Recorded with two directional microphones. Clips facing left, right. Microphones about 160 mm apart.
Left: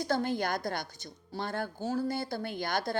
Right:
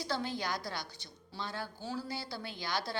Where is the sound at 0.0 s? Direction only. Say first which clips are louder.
Left 6 dB; 50° left (ahead or behind).